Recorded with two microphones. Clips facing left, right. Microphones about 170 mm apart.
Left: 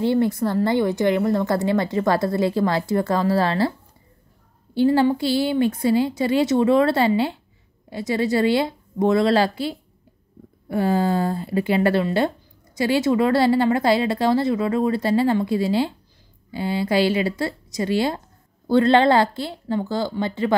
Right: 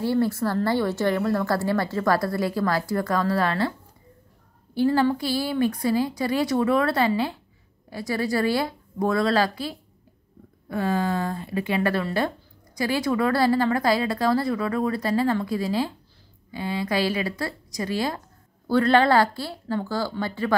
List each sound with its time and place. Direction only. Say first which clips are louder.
0.0 s a woman's voice: left 3 dB; 20° left (ahead or behind)
4.7 s a woman's voice: left 3 dB; 25° left (ahead or behind)